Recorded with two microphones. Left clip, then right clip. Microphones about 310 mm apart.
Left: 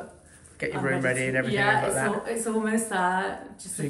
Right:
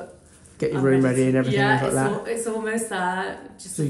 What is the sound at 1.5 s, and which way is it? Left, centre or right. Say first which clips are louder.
A woman's voice: even; centre.